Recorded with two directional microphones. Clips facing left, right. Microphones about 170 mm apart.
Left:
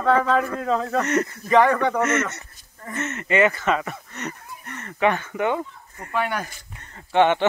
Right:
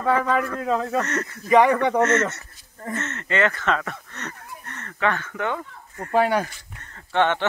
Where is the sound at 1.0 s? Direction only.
15° left (ahead or behind).